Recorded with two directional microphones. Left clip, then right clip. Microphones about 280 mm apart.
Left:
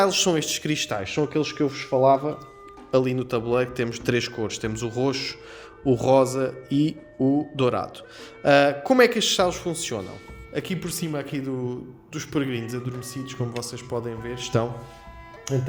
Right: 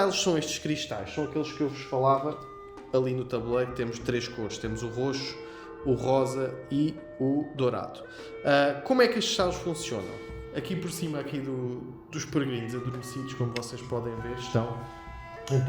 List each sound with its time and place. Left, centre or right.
0.0 s a man's voice: left
2.9 s a man's voice: left